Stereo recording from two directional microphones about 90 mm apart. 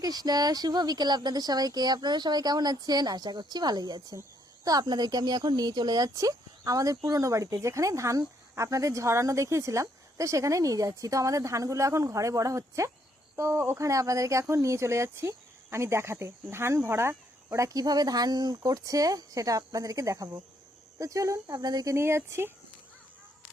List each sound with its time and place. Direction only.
0.0 s speech: 45° right (ahead or behind)
4.1 s speech: 40° right (ahead or behind)
17.7 s speech: 45° right (ahead or behind)
21.9 s speech: 30° right (ahead or behind)